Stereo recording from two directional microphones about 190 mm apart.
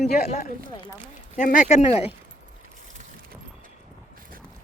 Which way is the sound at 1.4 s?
45° left (ahead or behind).